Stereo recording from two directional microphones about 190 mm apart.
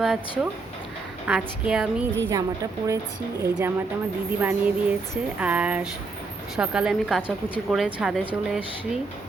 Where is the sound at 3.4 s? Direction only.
15° right (ahead or behind).